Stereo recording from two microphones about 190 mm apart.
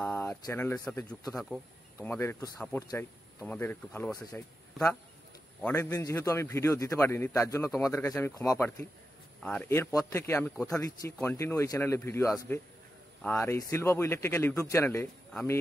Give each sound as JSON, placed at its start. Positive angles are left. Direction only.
{"t": 0.0, "sound": "speech", "side_deg": 10}
{"t": 5.6, "sound": "speech", "side_deg": 10}